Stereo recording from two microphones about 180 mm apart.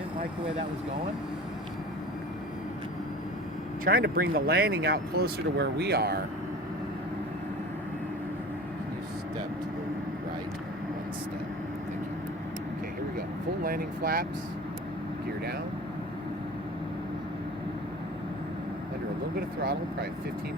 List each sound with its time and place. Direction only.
3.8 s speech: 55° right (ahead or behind)
13.7 s speech: 55° right (ahead or behind)